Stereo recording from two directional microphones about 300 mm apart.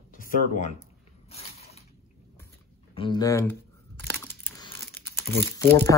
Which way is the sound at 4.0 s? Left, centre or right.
Centre.